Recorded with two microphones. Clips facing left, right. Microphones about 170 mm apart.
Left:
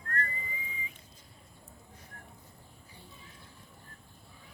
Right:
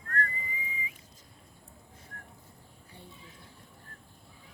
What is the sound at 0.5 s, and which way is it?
Whistling, 10° right (ahead or behind).